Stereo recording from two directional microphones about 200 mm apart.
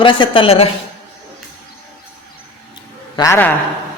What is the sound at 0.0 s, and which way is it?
Speech, 25° left (ahead or behind).